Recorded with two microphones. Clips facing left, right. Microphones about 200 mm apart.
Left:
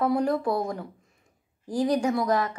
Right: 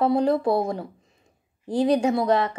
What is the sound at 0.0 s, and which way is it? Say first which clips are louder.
A woman's voice: right 4 dB; 25° right (ahead or behind).